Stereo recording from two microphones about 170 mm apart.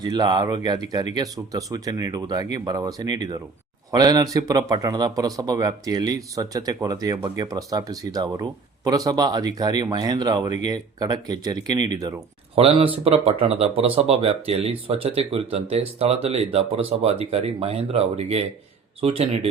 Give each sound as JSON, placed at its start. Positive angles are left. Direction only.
{"t": 0.0, "sound": "speech", "side_deg": -25}
{"t": 12.5, "sound": "speech", "side_deg": -35}